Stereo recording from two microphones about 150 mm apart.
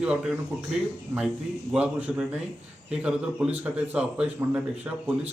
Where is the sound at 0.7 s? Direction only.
5° right (ahead or behind).